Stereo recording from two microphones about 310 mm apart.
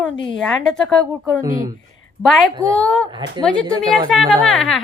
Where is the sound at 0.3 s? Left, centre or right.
Centre.